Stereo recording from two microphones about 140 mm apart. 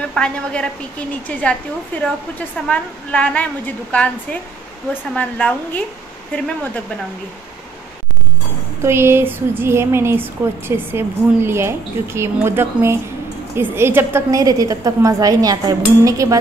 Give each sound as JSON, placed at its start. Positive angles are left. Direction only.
{"t": 0.1, "sound": "a woman's voice", "side_deg": 5}
{"t": 8.8, "sound": "a woman's voice", "side_deg": -20}